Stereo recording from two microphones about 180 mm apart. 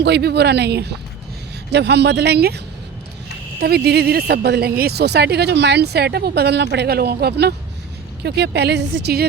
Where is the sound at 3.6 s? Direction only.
60° right (ahead or behind).